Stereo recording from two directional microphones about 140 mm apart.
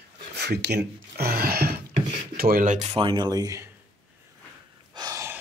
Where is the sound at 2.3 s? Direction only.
90° right; by 3.7 s 25° right (ahead or behind).